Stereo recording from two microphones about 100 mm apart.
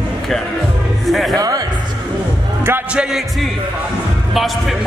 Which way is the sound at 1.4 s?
40° right (ahead or behind).